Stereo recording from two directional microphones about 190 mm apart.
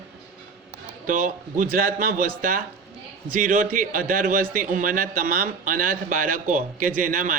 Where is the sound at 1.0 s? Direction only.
45° right (ahead or behind).